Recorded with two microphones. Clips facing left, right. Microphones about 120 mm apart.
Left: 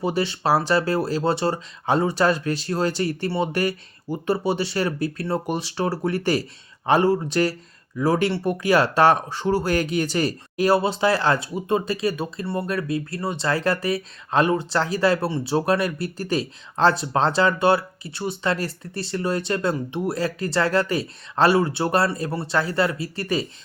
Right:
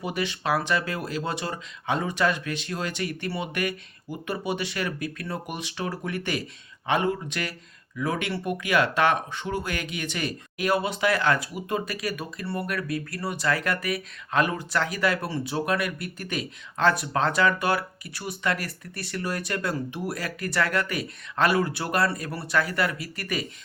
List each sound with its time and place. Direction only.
0.0 s speech: 30° left (ahead or behind)